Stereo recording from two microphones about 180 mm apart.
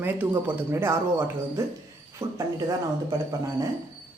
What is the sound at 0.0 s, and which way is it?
Speech, 10° right (ahead or behind).